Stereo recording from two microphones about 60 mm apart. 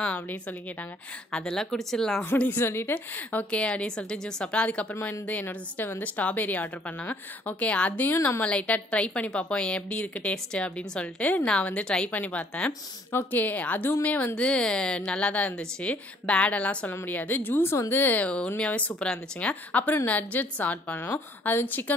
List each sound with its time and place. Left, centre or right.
0.1 s a woman's voice: left
1.3 s speech: centre
2.5 s a woman's voice: left
8.0 s a woman's voice: left
8.5 s a woman's voice: left
11.8 s speech: centre
12.1 s a woman's voice: left
13.1 s a woman's voice: left
14.3 s a woman's voice: centre; by 18.2 s left
18.2 s a woman's voice: centre